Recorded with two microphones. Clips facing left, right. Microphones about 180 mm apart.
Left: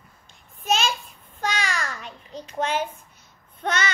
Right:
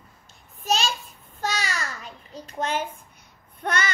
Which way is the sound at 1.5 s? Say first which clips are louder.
Left 4 dB; 40° right (ahead or behind).